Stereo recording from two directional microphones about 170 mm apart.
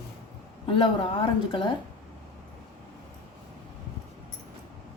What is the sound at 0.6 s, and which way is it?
A woman's voice, 30° left (ahead or behind).